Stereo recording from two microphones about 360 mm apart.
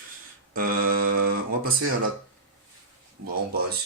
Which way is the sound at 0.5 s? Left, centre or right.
Right.